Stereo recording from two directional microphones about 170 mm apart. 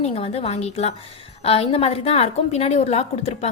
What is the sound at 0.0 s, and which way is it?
Speech, 40° left (ahead or behind).